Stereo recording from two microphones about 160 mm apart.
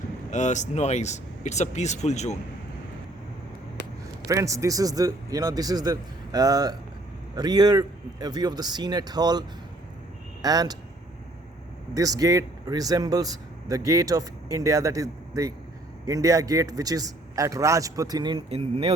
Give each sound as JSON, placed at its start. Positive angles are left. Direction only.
{"t": 0.3, "sound": "speech", "side_deg": 50}
{"t": 4.3, "sound": "speech", "side_deg": -20}
{"t": 10.4, "sound": "speech", "side_deg": -25}
{"t": 11.9, "sound": "speech", "side_deg": -20}